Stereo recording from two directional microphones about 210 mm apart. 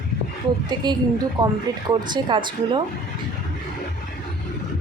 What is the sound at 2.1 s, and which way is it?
Speech, 20° right (ahead or behind).